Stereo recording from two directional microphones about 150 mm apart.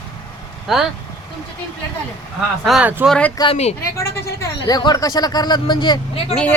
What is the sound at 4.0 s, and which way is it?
Speech, 25° left (ahead or behind).